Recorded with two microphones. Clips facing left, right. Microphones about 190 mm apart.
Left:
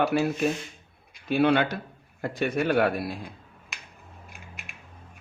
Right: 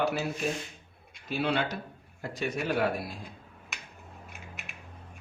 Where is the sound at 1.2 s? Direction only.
60° left (ahead or behind).